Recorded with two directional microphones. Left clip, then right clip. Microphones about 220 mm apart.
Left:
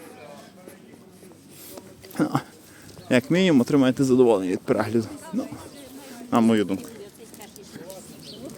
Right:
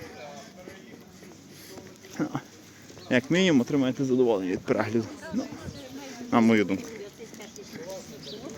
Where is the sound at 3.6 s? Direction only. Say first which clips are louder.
Left 6 dB; 40° left (ahead or behind); by 6.8 s 10° left (ahead or behind).